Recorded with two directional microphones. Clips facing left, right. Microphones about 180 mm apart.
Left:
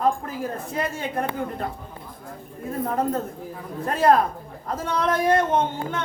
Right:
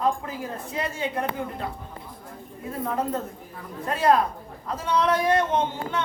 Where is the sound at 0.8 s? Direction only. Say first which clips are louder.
Left 1 dB; 45° left (ahead or behind).